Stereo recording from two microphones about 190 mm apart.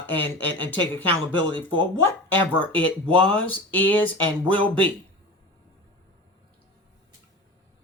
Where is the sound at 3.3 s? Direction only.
10° left (ahead or behind).